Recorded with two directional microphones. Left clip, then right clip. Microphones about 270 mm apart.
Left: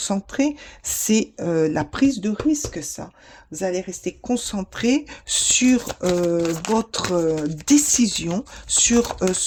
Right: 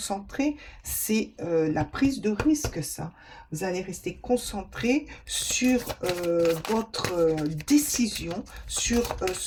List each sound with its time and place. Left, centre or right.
0.0 s speech: left
3.6 s speech: left
5.9 s speech: left
6.9 s speech: left